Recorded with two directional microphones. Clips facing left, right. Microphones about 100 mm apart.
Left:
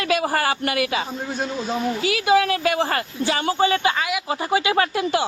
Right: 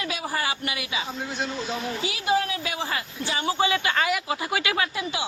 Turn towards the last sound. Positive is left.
turn(degrees=55)  # may be behind; listen again after turning